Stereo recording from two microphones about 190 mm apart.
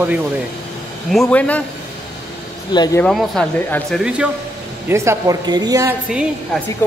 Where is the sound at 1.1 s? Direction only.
5° left (ahead or behind).